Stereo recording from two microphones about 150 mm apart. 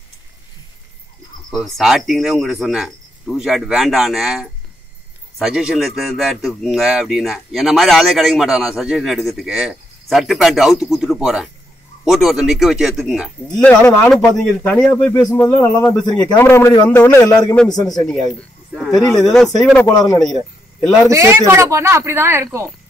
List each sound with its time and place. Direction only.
1.5 s a man's voice: centre (ahead or behind)
13.8 s speech: 20° left (ahead or behind)
14.2 s a man's voice: 10° left (ahead or behind)
18.8 s a sound: centre (ahead or behind)
19.6 s a man's voice: 5° left (ahead or behind)
19.9 s speech: 25° left (ahead or behind)
21.1 s a woman's voice: 20° right (ahead or behind)